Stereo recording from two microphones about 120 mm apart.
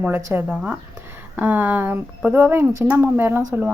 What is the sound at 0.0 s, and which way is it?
A woman's voice, 15° right (ahead or behind).